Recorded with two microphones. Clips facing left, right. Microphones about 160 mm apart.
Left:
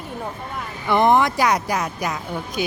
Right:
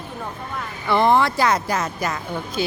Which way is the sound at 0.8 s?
15° left (ahead or behind).